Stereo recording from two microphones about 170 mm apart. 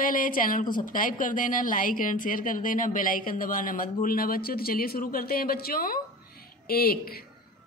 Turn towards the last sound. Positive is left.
turn(degrees=60)  # may be behind; listen again after turning